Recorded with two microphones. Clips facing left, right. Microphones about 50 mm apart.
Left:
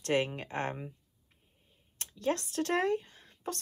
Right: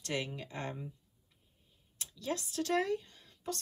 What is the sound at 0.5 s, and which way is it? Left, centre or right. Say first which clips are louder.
Speech: left 6 dB; left.